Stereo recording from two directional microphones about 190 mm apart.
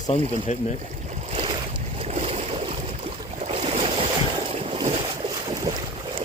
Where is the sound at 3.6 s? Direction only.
30° right (ahead or behind).